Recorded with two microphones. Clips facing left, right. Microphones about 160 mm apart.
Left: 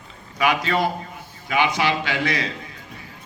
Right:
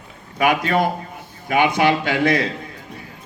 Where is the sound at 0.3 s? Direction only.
50° right (ahead or behind).